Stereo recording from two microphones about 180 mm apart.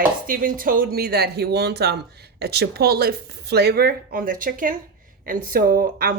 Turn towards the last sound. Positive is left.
turn(degrees=-55)  # may be behind; listen again after turning